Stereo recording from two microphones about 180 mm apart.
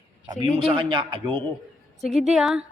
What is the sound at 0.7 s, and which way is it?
Speech, 30° right (ahead or behind).